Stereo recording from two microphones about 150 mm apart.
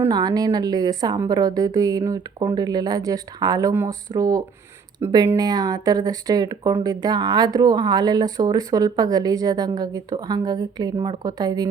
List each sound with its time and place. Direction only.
0.1 s a woman's voice: 25° right (ahead or behind)